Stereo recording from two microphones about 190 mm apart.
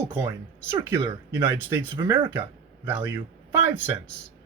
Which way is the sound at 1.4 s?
10° right (ahead or behind).